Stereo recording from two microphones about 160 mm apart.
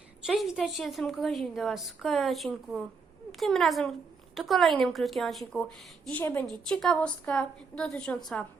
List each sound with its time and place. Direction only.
0.3 s a woman's voice: centre (ahead or behind)